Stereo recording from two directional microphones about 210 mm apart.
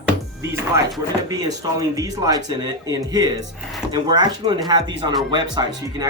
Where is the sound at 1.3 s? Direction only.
15° right (ahead or behind).